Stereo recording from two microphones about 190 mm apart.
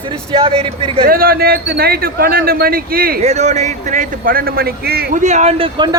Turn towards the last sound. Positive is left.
turn(degrees=-25)  # may be behind; listen again after turning